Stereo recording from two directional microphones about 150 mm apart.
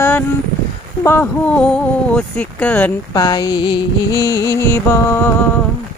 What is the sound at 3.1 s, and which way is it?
Female singing, 25° left (ahead or behind).